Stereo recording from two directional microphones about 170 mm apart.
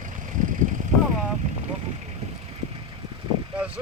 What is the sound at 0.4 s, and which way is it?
Vehicle, 50° right (ahead or behind).